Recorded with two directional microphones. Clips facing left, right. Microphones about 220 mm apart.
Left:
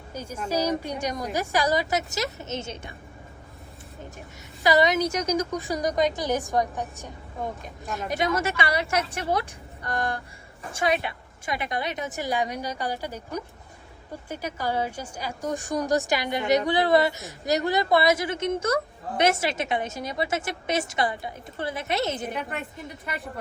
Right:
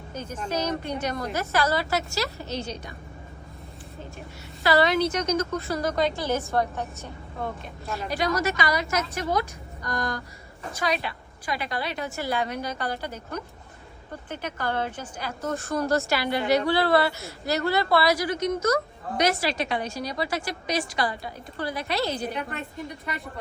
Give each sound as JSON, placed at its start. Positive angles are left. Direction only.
{"t": 0.1, "sound": "a woman's voice", "side_deg": 10}
{"t": 4.6, "sound": "a woman's voice", "side_deg": 15}
{"t": 8.1, "sound": "a woman's voice", "side_deg": 25}
{"t": 22.3, "sound": "a woman's voice", "side_deg": 0}